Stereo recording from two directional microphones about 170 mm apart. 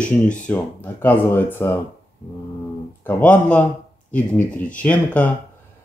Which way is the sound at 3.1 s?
10° left (ahead or behind).